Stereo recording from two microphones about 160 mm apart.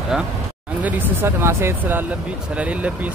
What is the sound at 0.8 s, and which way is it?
Speech, 15° right (ahead or behind).